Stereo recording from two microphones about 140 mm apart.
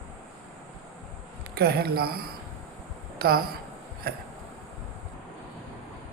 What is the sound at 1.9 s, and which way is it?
A man's voice, 90° right.